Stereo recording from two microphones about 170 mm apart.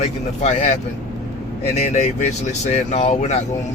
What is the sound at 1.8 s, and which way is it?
Speech, 40° left (ahead or behind).